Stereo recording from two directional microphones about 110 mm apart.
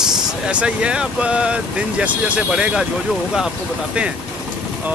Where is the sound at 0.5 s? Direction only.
10° right (ahead or behind).